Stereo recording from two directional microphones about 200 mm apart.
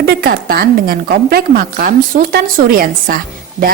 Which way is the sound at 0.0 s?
50° right (ahead or behind).